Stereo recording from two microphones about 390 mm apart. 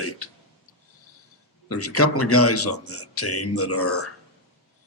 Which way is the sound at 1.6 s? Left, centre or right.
Left.